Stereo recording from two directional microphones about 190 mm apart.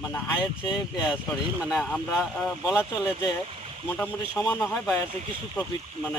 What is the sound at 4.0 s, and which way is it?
Speech, 15° left (ahead or behind).